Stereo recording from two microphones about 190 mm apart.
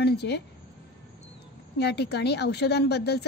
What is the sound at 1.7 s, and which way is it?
A woman's voice, 60° left (ahead or behind).